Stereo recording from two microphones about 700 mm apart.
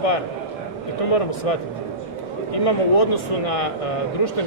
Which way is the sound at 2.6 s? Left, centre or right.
Left.